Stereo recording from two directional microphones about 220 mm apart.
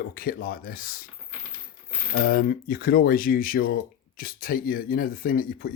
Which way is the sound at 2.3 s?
40° left (ahead or behind).